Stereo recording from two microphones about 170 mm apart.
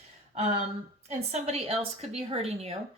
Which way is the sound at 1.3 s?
40° right (ahead or behind).